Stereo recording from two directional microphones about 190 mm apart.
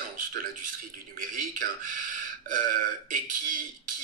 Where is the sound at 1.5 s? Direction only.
45° right (ahead or behind).